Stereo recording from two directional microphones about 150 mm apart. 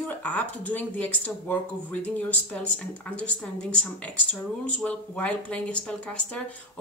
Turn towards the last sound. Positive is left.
turn(degrees=10)  # may be behind; listen again after turning